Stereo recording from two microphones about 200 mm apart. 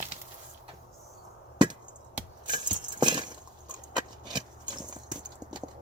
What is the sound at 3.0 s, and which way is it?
Clip-clop, 20° right (ahead or behind).